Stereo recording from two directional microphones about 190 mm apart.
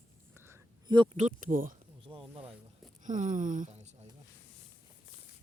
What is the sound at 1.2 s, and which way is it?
Speech, 40° right (ahead or behind).